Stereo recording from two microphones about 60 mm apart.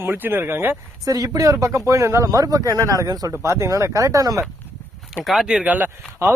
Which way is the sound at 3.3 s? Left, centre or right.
Right.